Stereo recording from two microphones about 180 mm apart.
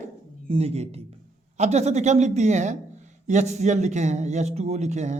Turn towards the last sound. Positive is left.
turn(degrees=-40)  # may be behind; listen again after turning